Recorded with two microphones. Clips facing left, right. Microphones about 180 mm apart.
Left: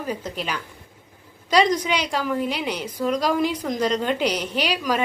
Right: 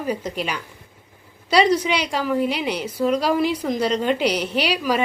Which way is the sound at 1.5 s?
10° right (ahead or behind).